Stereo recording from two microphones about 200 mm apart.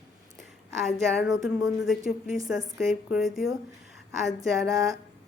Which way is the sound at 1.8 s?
Centre (ahead or behind).